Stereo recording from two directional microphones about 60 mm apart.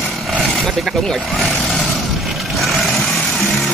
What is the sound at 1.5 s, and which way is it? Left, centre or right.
Vehicle, centre.